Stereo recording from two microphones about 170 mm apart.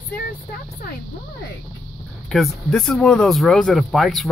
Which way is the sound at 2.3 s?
Centre (ahead or behind).